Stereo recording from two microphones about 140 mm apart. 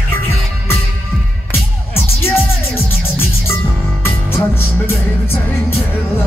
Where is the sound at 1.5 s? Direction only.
15° left (ahead or behind).